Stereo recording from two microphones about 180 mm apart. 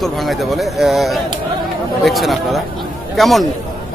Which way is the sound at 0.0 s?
Centre (ahead or behind).